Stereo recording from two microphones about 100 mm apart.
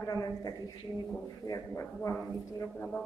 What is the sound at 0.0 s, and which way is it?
Speech, 35° left (ahead or behind).